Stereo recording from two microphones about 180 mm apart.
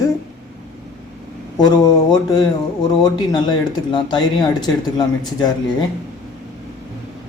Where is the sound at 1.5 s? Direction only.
20° left (ahead or behind).